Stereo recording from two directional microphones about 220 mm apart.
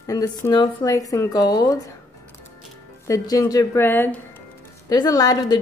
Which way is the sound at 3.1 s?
15° left (ahead or behind).